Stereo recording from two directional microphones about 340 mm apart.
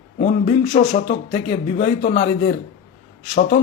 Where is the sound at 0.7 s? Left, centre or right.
Left.